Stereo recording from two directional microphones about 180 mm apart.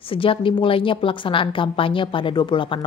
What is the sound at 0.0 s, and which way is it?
A woman's voice, 30° left (ahead or behind).